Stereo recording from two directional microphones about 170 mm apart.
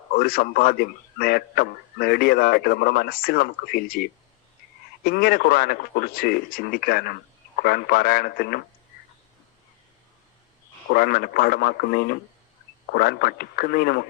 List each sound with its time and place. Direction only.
0.1 s a man's voice: 60° left (ahead or behind)
10.9 s a man's voice: 60° left (ahead or behind)